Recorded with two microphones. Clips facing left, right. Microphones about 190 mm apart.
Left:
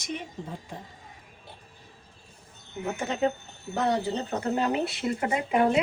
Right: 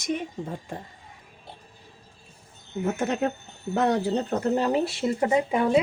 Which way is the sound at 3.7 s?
60° right (ahead or behind).